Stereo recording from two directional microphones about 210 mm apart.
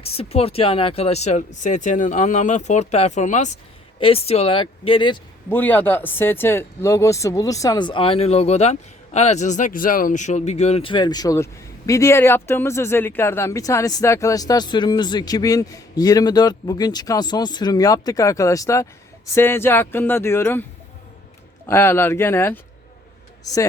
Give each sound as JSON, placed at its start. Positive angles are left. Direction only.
{"t": 0.0, "sound": "speech", "side_deg": 30}
{"t": 5.5, "sound": "speech", "side_deg": 10}
{"t": 21.7, "sound": "speech", "side_deg": 10}